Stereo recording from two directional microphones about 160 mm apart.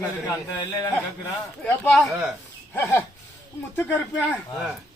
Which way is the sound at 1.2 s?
15° left (ahead or behind).